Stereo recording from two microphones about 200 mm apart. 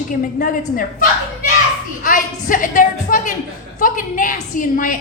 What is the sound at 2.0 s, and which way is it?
A woman's voice, 40° left (ahead or behind).